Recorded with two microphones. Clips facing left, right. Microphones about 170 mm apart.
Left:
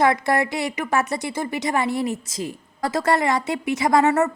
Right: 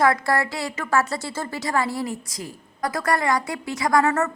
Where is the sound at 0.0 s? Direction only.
20° left (ahead or behind).